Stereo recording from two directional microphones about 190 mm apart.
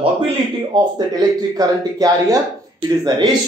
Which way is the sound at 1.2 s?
20° right (ahead or behind).